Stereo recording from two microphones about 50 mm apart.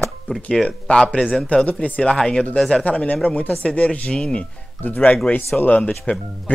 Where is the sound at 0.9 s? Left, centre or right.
Centre.